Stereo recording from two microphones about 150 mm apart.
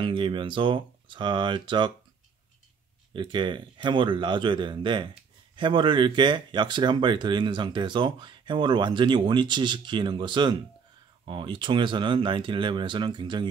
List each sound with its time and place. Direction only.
0.0 s speech: 35° right (ahead or behind)
3.1 s speech: 30° right (ahead or behind)